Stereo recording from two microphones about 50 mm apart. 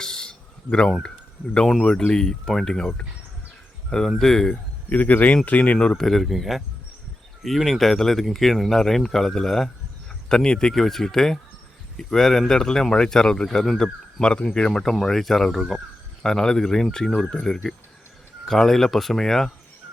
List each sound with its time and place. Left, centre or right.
0.0 s a sound: centre
1.8 s speech: left
4.9 s speech: left
6.0 s speech: centre